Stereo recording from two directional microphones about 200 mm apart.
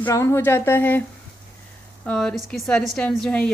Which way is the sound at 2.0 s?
5° left (ahead or behind).